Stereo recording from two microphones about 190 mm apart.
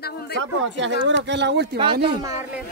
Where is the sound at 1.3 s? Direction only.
65° right (ahead or behind).